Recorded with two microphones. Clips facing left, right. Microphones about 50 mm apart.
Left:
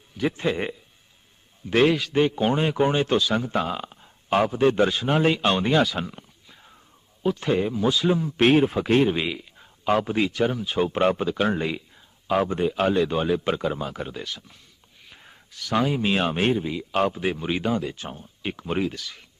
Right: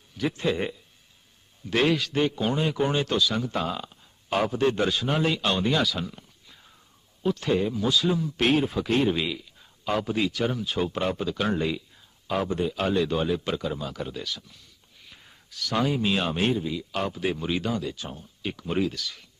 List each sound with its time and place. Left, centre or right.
0.2 s a man's voice: left
4.4 s a man's voice: centre
7.2 s a man's voice: centre
7.4 s a man's voice: left
10.5 s speech: centre
10.8 s speech: left
11.3 s a man's voice: left
15.0 s a sound: left
15.9 s a man's voice: left